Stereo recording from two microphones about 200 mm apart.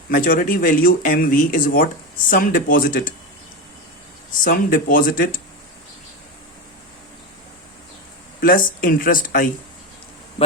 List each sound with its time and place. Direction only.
0.1 s speech: 45° left (ahead or behind)
4.4 s speech: 45° left (ahead or behind)
8.4 s speech: 45° left (ahead or behind)